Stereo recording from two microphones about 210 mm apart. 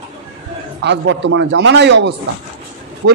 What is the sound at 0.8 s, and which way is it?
A man's voice, 55° right (ahead or behind).